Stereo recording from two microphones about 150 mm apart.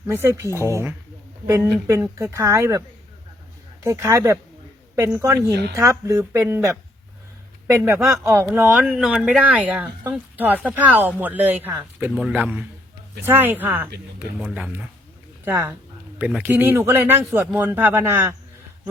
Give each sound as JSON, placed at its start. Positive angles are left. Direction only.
{"t": 0.1, "sound": "speech", "side_deg": -15}
{"t": 3.8, "sound": "speech", "side_deg": -20}